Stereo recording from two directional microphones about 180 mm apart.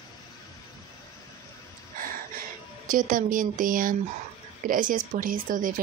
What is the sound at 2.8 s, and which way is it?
Speech, 50° right (ahead or behind).